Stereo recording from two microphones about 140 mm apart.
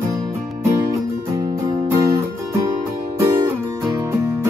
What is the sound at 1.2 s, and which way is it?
Music, 20° right (ahead or behind).